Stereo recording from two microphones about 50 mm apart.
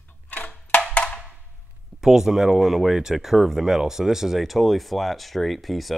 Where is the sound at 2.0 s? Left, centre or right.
Centre.